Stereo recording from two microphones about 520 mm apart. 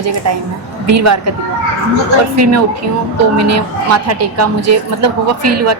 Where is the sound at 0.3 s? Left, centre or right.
Right.